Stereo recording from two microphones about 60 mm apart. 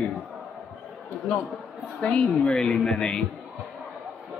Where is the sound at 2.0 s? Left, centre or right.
Centre.